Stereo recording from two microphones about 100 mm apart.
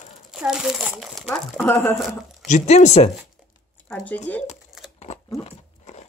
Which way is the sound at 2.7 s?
90° left.